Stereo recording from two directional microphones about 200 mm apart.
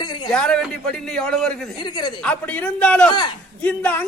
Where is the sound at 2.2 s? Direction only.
5° left (ahead or behind).